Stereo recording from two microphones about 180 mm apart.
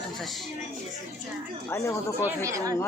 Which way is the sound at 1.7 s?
15° left (ahead or behind).